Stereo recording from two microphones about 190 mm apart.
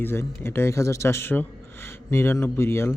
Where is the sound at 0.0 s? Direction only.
10° left (ahead or behind).